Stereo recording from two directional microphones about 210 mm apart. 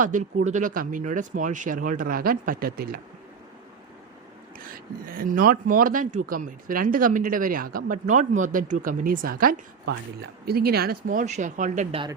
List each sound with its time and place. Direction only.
0.0 s speech: 40° right (ahead or behind)
4.5 s speech: 45° right (ahead or behind); by 12.1 s 25° right (ahead or behind)